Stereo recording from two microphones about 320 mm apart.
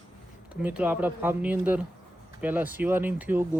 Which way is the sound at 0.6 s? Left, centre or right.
Centre.